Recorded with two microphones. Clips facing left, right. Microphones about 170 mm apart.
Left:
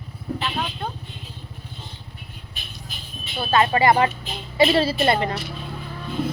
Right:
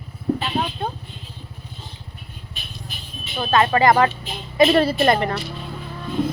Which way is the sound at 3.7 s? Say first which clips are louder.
Right 2 dB; 45° right (ahead or behind).